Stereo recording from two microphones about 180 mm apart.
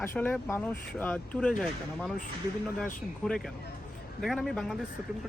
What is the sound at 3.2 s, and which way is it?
Speech, centre (ahead or behind).